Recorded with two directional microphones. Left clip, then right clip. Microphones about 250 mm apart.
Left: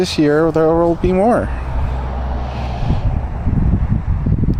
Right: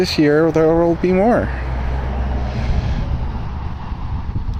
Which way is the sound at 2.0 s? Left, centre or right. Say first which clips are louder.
Left 1 dB; right.